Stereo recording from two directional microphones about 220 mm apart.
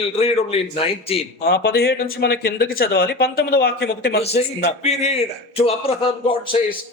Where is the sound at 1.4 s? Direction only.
45° left (ahead or behind).